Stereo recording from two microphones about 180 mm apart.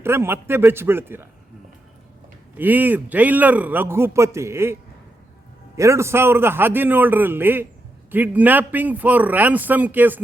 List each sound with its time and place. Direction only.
0.0 s a man's voice: 15° right (ahead or behind)
2.6 s a man's voice: 10° right (ahead or behind)